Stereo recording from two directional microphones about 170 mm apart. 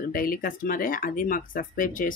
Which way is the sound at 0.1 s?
55° left (ahead or behind).